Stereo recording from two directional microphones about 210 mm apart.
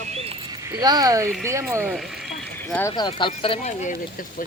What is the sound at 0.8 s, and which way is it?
Speech, 20° right (ahead or behind).